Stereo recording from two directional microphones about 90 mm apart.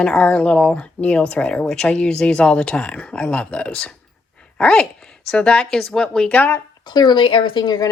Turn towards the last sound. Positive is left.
turn(degrees=55)  # may be behind; listen again after turning